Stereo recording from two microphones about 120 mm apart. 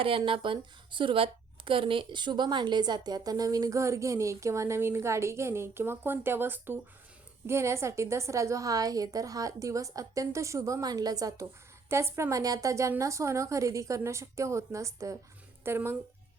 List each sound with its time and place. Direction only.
0.2 s a woman's voice: 45° right (ahead or behind); by 16.0 s 20° right (ahead or behind)